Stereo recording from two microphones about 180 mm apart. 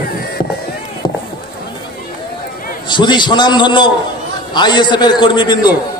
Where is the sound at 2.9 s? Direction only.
25° left (ahead or behind).